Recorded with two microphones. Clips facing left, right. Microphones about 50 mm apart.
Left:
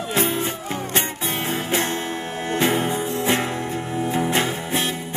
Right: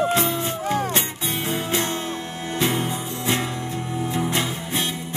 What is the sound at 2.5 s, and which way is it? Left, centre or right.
Music, left.